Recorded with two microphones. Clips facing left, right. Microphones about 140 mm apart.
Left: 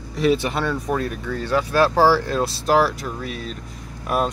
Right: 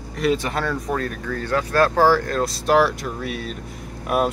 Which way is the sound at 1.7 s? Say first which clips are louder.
Even; 5° left (ahead or behind).